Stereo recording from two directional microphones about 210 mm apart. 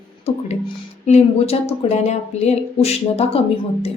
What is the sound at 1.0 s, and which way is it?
A woman's voice, 30° left (ahead or behind).